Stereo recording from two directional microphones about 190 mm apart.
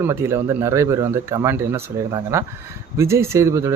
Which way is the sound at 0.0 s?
15° right (ahead or behind).